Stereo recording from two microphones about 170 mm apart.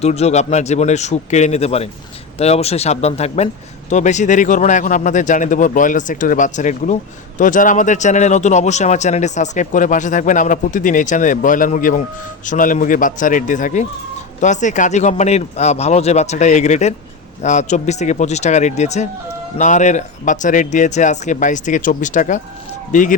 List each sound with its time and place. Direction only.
0.0 s a man's voice: 40° left (ahead or behind)